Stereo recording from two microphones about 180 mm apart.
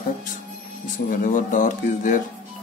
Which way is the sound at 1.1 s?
45° left (ahead or behind).